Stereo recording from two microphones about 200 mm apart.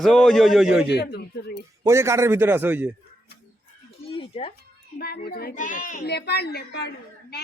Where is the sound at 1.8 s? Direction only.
15° right (ahead or behind).